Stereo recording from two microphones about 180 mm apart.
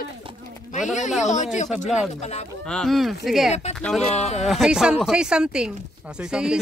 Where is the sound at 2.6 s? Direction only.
5° left (ahead or behind).